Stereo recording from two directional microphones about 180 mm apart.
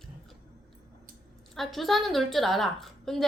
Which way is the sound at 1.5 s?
Centre (ahead or behind).